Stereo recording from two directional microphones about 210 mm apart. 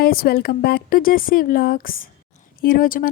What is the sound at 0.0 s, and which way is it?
A woman's voice, 45° left (ahead or behind).